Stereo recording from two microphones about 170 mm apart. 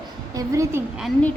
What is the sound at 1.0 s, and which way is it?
Speech, 10° left (ahead or behind).